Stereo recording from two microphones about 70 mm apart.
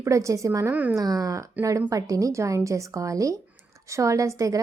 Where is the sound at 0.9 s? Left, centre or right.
Right.